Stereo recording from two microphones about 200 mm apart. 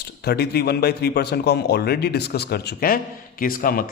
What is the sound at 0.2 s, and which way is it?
A man's voice, 55° left (ahead or behind).